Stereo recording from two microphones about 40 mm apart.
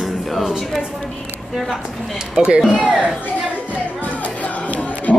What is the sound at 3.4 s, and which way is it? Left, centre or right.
Music, right.